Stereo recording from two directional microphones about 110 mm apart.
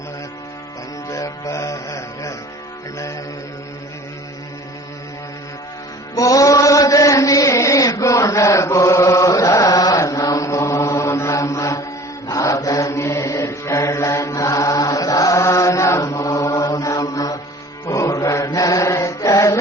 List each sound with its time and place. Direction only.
1.0 s music: 30° left (ahead or behind)
6.1 s chant: 30° left (ahead or behind)
12.3 s mantra: 30° left (ahead or behind)